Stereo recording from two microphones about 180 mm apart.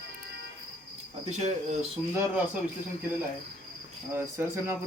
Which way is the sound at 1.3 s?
40° right (ahead or behind).